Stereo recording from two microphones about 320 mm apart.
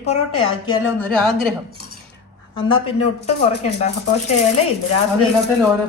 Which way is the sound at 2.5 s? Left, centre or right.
Centre.